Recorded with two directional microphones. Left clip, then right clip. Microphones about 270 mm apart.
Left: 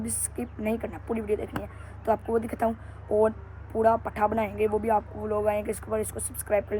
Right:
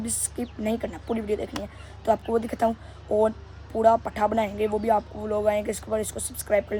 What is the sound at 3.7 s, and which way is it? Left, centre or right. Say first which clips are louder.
Speech: right 3 dB; right.